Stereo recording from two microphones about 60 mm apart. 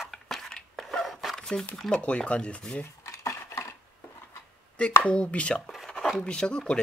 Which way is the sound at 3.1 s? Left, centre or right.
Left.